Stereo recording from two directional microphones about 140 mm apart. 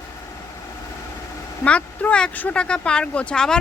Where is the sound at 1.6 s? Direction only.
10° left (ahead or behind).